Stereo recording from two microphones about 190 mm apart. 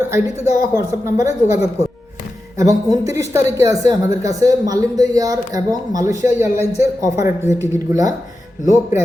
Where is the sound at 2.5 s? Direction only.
15° right (ahead or behind).